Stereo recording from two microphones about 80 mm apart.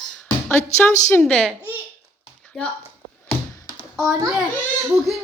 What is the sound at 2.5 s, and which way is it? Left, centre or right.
Speech, centre.